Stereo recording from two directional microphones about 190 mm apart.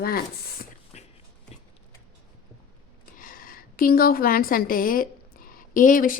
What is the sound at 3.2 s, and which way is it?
A woman's voice, 45° left (ahead or behind).